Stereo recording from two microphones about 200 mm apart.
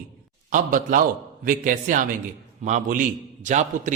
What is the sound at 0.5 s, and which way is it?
A man's voice, 40° right (ahead or behind).